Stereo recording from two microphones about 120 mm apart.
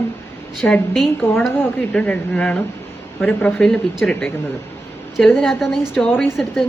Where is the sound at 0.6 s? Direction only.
10° left (ahead or behind).